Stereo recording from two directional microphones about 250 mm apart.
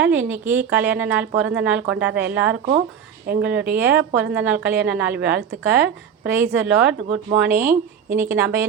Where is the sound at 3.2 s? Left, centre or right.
Right.